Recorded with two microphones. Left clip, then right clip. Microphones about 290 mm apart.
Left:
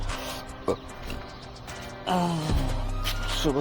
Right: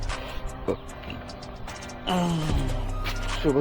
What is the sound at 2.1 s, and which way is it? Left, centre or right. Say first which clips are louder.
Music: left 1 dB; left.